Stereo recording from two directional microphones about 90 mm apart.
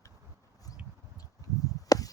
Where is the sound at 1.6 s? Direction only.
40° left (ahead or behind).